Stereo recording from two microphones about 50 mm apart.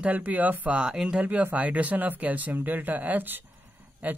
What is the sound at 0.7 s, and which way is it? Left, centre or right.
Speech, centre.